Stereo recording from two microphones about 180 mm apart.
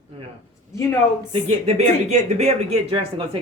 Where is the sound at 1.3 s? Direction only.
35° right (ahead or behind).